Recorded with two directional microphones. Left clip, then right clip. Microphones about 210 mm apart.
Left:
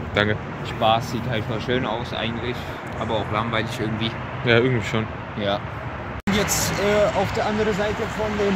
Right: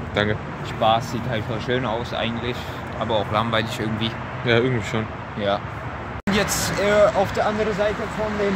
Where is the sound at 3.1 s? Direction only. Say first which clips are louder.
Right 3 dB; 60° right (ahead or behind).